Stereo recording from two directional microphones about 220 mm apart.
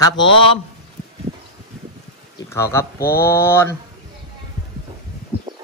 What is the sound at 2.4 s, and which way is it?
Speech, 10° left (ahead or behind).